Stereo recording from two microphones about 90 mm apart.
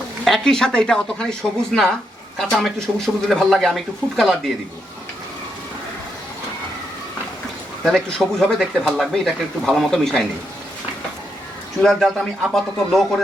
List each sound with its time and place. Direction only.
0.3 s speech: 5° left (ahead or behind)
7.9 s speech: 5° left (ahead or behind)
11.8 s speech: 5° left (ahead or behind)